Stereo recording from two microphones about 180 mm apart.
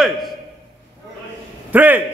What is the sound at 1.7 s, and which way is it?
Speech, 10° right (ahead or behind).